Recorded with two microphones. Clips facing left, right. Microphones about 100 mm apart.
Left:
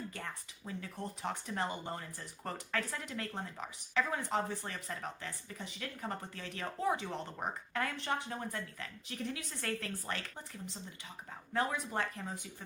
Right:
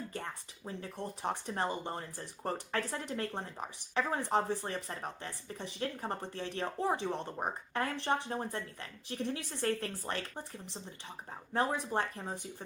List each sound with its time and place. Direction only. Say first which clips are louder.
0.1 s speech: right 3 dB; 30° right (ahead or behind)